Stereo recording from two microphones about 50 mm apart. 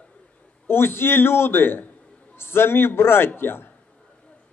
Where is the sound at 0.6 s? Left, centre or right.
Left.